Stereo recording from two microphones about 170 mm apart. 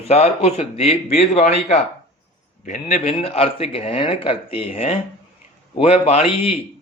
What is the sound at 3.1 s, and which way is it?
Speech, 35° left (ahead or behind).